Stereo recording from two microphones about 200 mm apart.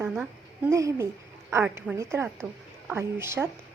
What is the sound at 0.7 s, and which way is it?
A woman's voice, 15° right (ahead or behind).